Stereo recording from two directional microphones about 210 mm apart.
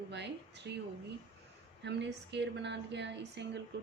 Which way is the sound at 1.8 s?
55° right (ahead or behind).